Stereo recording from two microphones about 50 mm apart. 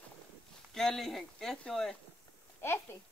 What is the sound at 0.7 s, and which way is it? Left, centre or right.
Speech, centre.